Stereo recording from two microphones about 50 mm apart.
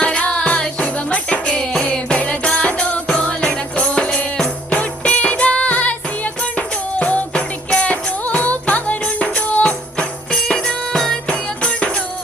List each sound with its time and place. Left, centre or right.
0.0 s music: left
10.3 s music: centre
11.3 s music: left